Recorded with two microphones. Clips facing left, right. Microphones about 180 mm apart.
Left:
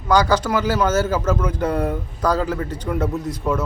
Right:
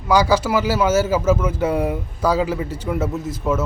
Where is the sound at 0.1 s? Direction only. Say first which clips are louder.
Right 1 dB; 10° right (ahead or behind).